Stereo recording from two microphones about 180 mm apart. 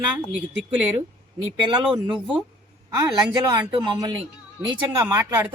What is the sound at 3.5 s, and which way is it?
Speech, 25° right (ahead or behind).